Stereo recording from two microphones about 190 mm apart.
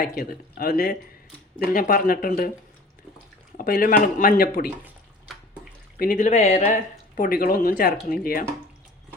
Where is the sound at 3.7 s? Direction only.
50° left (ahead or behind).